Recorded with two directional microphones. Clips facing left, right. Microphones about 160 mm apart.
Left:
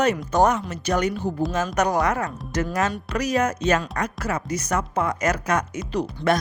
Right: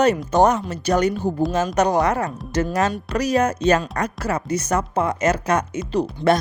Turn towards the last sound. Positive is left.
turn(degrees=-30)  # may be behind; listen again after turning